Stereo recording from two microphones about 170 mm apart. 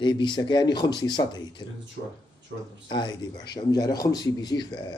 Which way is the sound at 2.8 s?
25° left (ahead or behind).